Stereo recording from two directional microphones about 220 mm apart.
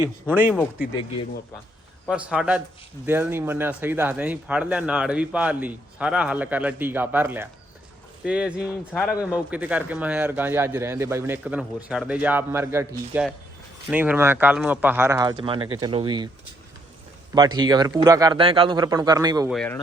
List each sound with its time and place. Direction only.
0.0 s speech: 10° right (ahead or behind)
2.0 s a man's voice: 5° right (ahead or behind); by 16.3 s 20° right (ahead or behind)
17.3 s speech: 20° right (ahead or behind)
19.5 s a man's voice: 5° left (ahead or behind)